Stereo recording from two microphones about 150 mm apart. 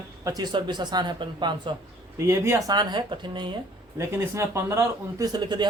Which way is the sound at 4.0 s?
20° right (ahead or behind).